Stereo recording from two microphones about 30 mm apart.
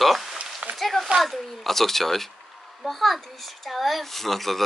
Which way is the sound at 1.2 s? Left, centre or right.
Centre.